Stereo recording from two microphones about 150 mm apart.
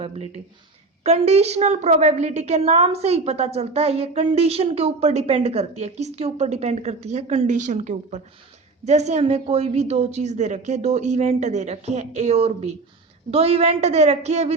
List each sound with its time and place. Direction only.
1.0 s a woman's voice: 45° right (ahead or behind)